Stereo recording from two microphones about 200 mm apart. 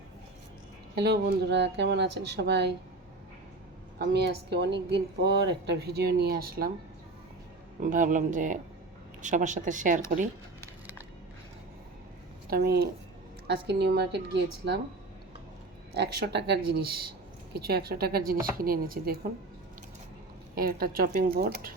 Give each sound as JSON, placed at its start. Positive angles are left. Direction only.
{"t": 0.9, "sound": "speech", "side_deg": -55}
{"t": 3.9, "sound": "speech", "side_deg": -55}
{"t": 7.8, "sound": "speech", "side_deg": -40}
{"t": 12.5, "sound": "speech", "side_deg": -50}
{"t": 16.0, "sound": "speech", "side_deg": -60}
{"t": 20.6, "sound": "speech", "side_deg": -50}